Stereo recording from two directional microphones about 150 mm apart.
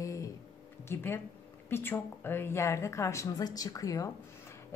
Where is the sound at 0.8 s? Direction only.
15° left (ahead or behind).